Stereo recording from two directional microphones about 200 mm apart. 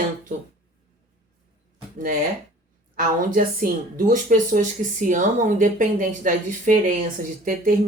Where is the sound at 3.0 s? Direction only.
45° right (ahead or behind).